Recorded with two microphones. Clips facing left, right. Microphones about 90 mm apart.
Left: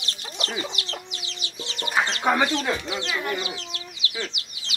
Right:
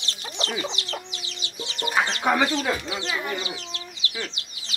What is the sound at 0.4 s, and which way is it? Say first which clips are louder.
Chicken: right 1 dB; 30° right (ahead or behind).